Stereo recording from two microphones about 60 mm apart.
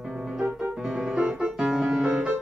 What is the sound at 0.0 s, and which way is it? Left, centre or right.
Music, centre.